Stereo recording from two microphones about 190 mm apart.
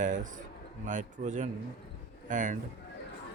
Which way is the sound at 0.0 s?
40° right (ahead or behind).